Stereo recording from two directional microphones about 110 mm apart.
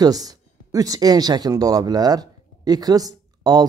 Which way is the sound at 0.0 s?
35° right (ahead or behind).